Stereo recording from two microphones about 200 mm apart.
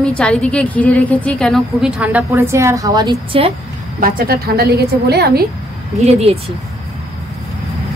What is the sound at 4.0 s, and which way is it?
A woman's voice, 45° right (ahead or behind).